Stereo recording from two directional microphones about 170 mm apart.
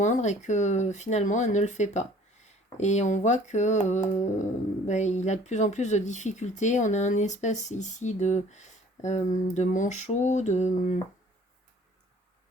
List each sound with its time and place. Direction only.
0.0 s speech: 45° left (ahead or behind)